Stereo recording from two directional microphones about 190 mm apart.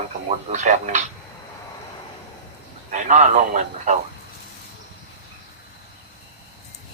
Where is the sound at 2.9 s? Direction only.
40° right (ahead or behind).